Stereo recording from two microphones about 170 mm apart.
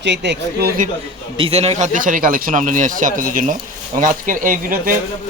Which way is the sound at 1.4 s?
35° right (ahead or behind).